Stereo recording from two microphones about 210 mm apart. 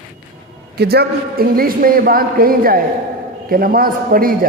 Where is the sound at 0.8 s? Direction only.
50° right (ahead or behind).